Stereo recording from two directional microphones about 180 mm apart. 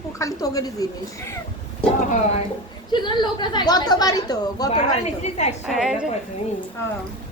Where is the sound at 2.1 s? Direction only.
40° left (ahead or behind).